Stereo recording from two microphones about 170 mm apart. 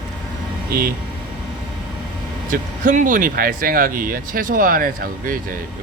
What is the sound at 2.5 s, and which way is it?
Speech, 50° right (ahead or behind).